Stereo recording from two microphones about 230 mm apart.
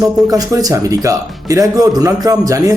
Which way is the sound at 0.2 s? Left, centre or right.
Centre.